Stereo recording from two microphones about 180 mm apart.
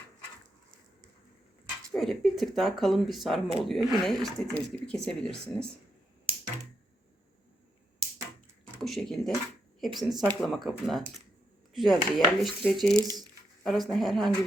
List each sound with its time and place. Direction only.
1.9 s speech: centre (ahead or behind)
8.8 s speech: centre (ahead or behind)
13.0 s speech: 20° right (ahead or behind)
13.7 s speech: centre (ahead or behind)